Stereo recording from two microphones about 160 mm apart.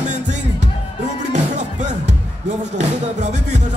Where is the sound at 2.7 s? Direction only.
45° right (ahead or behind).